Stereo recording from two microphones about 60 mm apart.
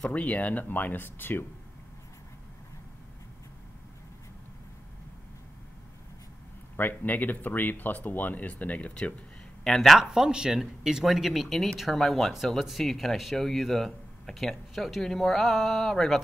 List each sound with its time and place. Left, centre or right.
0.1 s speech: left
6.8 s speech: left
9.7 s speech: centre
10.0 s speech: centre